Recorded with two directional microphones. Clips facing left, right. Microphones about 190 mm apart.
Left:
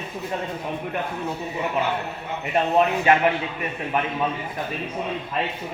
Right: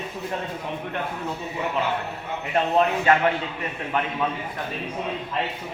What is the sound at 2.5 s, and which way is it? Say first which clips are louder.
Speech: left 1 dB; 15° left (ahead or behind).